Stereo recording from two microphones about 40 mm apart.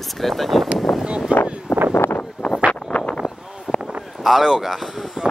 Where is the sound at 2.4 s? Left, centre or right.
Left.